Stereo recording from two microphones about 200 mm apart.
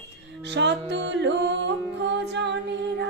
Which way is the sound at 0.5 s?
60° right (ahead or behind).